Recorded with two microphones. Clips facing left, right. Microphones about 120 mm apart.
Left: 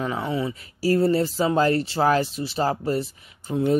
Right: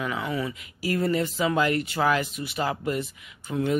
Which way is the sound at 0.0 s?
30° left (ahead or behind).